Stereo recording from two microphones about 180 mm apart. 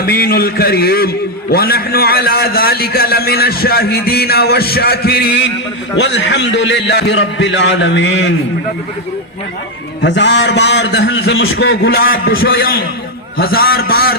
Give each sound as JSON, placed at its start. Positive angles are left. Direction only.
{"t": 0.0, "sound": "a man's voice", "side_deg": 55}
{"t": 10.0, "sound": "a man's voice", "side_deg": 80}